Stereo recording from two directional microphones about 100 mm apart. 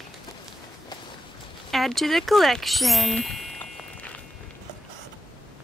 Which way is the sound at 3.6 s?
15° left (ahead or behind).